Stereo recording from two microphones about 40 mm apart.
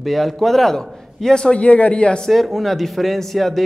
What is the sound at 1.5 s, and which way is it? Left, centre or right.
Speech, left.